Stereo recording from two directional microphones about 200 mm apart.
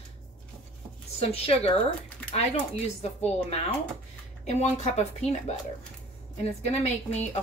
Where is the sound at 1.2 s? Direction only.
30° left (ahead or behind).